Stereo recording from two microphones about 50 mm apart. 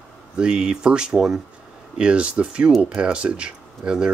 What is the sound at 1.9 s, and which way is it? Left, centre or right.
Speech, right.